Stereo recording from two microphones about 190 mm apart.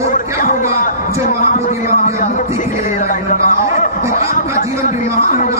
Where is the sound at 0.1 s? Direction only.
45° left (ahead or behind).